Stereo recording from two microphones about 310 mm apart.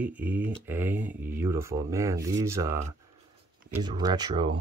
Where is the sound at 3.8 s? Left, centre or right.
Centre.